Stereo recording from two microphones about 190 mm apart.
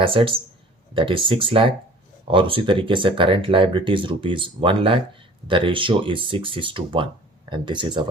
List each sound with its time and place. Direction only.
0.0 s speech: 25° right (ahead or behind)